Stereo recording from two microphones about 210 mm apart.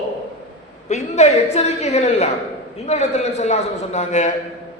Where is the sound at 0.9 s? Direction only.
30° left (ahead or behind).